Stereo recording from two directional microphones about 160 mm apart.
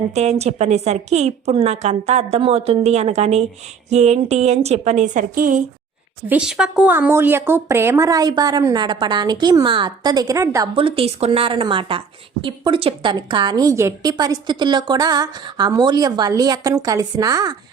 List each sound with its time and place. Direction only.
0.1 s a woman's voice: 45° right (ahead or behind)
6.2 s a woman's voice: 5° right (ahead or behind)
10.8 s a woman's voice: 35° right (ahead or behind)